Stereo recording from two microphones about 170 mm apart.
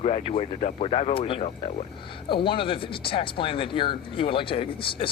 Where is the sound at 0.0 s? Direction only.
35° left (ahead or behind).